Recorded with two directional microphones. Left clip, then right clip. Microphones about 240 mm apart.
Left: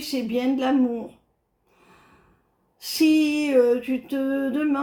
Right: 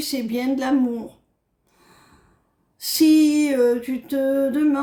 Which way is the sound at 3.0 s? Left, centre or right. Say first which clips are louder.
Right 4 dB; right.